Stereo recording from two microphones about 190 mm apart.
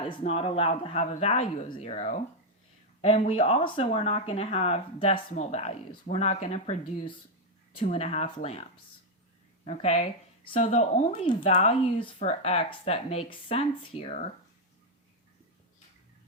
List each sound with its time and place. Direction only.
0.0 s speech: 30° left (ahead or behind)
9.6 s speech: 35° left (ahead or behind)